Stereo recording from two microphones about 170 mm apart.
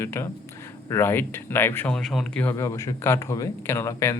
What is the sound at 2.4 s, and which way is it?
Speech, 15° left (ahead or behind).